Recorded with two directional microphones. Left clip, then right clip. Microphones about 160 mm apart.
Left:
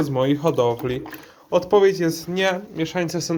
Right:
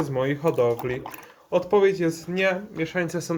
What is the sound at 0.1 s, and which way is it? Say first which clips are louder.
Speech: left 4 dB; 30° left (ahead or behind).